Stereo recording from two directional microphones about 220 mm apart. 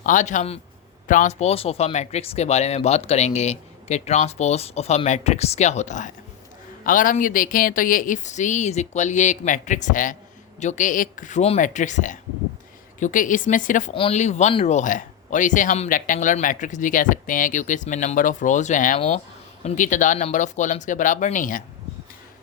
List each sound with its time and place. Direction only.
0.0 s speech: 35° left (ahead or behind)